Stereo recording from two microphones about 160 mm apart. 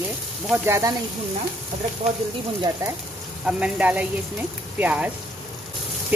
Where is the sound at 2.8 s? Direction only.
20° right (ahead or behind).